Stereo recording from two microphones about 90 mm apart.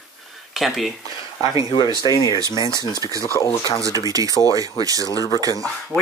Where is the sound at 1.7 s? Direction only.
55° left (ahead or behind).